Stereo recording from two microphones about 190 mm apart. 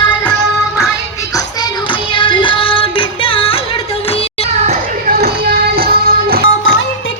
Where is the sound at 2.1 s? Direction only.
25° left (ahead or behind).